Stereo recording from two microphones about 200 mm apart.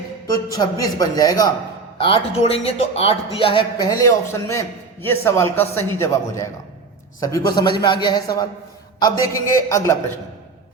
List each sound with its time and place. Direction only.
0.3 s a man's voice: 20° left (ahead or behind)